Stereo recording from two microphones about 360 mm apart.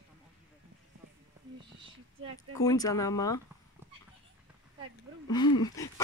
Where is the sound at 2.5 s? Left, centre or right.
Centre.